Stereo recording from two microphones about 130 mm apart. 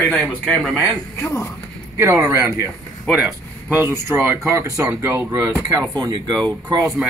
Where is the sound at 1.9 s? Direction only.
20° right (ahead or behind).